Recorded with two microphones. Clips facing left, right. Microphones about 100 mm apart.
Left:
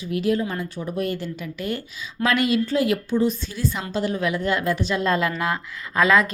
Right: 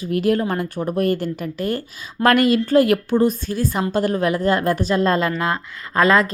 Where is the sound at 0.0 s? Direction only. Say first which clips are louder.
Right 4 dB; 50° right (ahead or behind).